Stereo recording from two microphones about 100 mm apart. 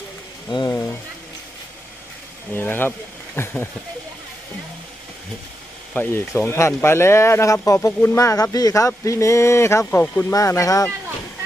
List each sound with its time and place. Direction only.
0.5 s speech: 45° left (ahead or behind)
2.5 s speech: 20° left (ahead or behind)
5.9 s speech: 15° left (ahead or behind)
10.0 s speech: 15° left (ahead or behind)
10.3 s speech: 30° left (ahead or behind)